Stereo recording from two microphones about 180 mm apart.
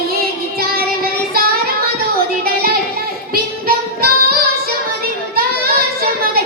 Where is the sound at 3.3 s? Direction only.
55° right (ahead or behind).